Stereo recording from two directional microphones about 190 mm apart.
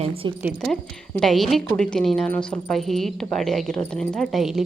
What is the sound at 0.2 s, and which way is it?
Speech, 25° right (ahead or behind).